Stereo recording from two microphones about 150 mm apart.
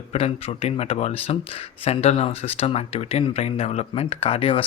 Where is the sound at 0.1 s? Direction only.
40° left (ahead or behind).